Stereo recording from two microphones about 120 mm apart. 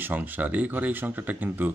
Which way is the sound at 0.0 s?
15° right (ahead or behind).